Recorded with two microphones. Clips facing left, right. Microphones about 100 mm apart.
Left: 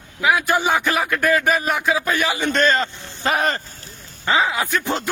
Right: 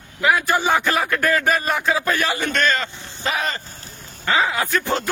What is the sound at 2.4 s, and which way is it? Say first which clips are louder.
Speech: left 3 dB; 25° left (ahead or behind).